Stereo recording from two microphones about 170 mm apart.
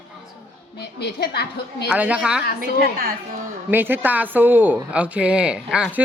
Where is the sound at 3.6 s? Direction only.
10° right (ahead or behind).